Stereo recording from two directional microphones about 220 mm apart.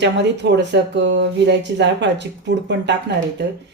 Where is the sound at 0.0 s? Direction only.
50° right (ahead or behind).